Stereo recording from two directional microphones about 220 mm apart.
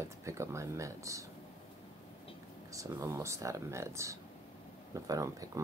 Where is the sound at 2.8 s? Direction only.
15° right (ahead or behind).